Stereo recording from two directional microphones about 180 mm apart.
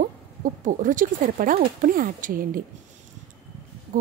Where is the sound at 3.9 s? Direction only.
50° right (ahead or behind).